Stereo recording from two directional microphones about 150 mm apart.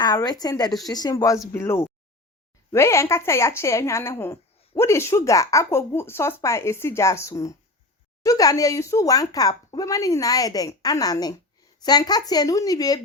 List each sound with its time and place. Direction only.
0.0 s a woman's voice: 25° left (ahead or behind)